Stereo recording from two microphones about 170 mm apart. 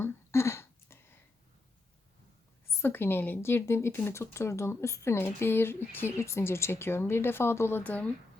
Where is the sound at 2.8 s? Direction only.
10° left (ahead or behind).